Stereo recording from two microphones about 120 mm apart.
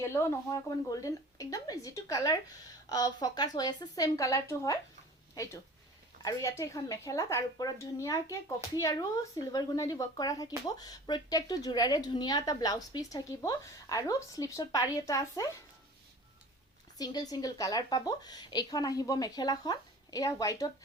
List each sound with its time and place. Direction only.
0.0 s a woman's voice: 25° left (ahead or behind)
6.2 s a woman's voice: 25° left (ahead or behind)
17.0 s a woman's voice: 35° left (ahead or behind)